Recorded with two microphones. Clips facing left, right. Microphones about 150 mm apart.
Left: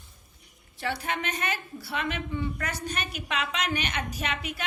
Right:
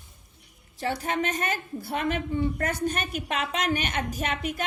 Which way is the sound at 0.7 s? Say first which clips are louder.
Right 3 dB; 40° right (ahead or behind).